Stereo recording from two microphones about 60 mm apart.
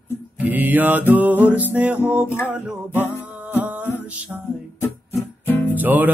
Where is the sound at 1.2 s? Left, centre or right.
Right.